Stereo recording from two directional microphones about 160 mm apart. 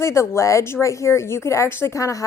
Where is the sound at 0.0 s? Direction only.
15° left (ahead or behind).